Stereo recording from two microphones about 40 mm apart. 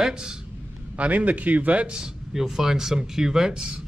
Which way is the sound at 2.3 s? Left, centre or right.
Centre.